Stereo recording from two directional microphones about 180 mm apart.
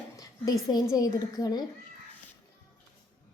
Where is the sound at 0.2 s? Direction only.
20° left (ahead or behind).